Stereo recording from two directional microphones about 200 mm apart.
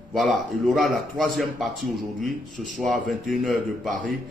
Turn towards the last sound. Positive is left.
turn(degrees=0)  # may be behind; listen again after turning